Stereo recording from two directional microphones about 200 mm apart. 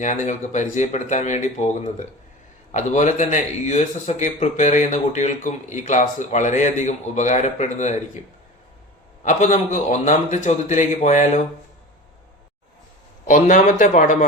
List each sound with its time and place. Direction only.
0.0 s speech: 35° left (ahead or behind)
9.2 s speech: 35° left (ahead or behind)
13.2 s speech: 40° left (ahead or behind)